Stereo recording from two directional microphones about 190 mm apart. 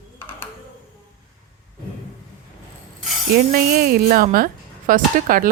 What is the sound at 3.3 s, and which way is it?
A woman's voice, 50° right (ahead or behind).